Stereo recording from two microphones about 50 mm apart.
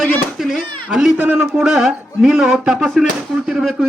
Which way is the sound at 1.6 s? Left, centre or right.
Centre.